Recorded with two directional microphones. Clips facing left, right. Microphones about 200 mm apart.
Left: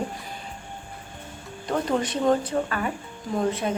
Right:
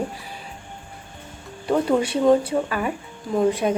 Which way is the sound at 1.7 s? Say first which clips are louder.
Right 5 dB; 10° right (ahead or behind).